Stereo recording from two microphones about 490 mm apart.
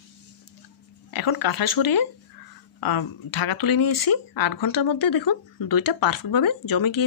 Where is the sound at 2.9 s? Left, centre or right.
Left.